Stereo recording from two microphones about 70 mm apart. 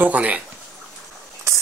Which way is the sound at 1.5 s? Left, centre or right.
Right.